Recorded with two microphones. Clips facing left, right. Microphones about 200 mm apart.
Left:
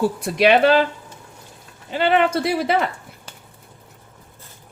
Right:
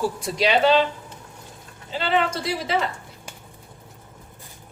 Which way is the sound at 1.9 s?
60° left (ahead or behind).